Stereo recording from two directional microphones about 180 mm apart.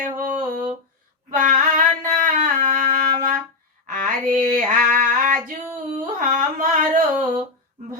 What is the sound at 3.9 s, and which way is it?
Female singing, 45° right (ahead or behind).